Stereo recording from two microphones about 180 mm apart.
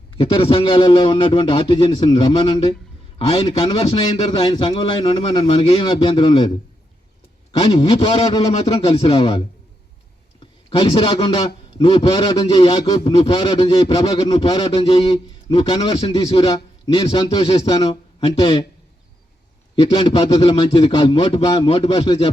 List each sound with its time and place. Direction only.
0.2 s a man's voice: 30° left (ahead or behind)
7.6 s a man's voice: 30° left (ahead or behind)
10.4 s a man's voice: 25° left (ahead or behind)
19.7 s a man's voice: 25° left (ahead or behind)